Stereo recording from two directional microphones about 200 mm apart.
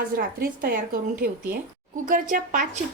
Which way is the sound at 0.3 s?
45° right (ahead or behind).